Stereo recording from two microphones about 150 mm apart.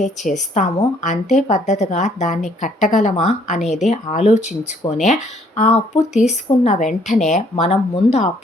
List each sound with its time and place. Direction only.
0.0 s a woman's voice: 50° left (ahead or behind)
4.8 s speech: 30° left (ahead or behind)
5.5 s a woman's voice: 50° left (ahead or behind)